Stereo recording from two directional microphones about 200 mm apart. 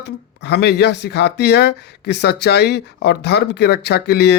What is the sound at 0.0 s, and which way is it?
Speech, 55° left (ahead or behind).